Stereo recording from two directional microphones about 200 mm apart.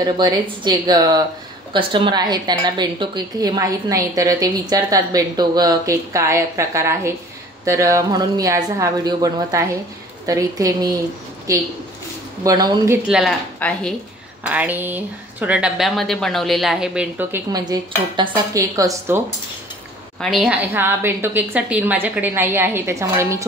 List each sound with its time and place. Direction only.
0.0 s speech: 20° right (ahead or behind)
12.4 s speech: 20° right (ahead or behind)
13.1 s speech: 5° left (ahead or behind)
14.4 s speech: 5° right (ahead or behind)
20.2 s speech: centre (ahead or behind)